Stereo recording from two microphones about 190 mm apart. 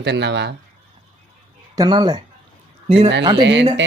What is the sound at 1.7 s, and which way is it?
Speech, 20° right (ahead or behind).